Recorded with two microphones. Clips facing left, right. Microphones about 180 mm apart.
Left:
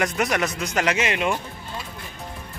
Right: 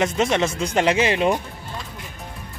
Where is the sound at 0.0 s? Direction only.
25° right (ahead or behind).